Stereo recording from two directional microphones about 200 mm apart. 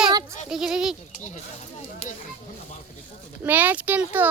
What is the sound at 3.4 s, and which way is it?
Speech, 10° right (ahead or behind).